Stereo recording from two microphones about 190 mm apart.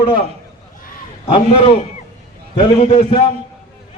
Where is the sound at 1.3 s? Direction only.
30° left (ahead or behind).